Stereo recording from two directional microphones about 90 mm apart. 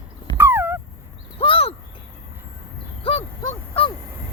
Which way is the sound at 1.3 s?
90° left.